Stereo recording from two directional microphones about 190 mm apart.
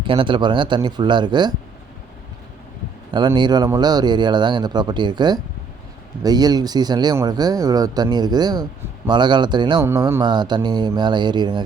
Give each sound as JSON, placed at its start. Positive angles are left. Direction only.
{"t": 0.0, "sound": "speech", "side_deg": -25}
{"t": 3.1, "sound": "speech", "side_deg": -20}